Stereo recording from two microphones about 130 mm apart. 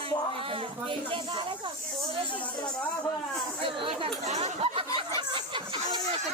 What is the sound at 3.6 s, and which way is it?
Speech, 40° right (ahead or behind).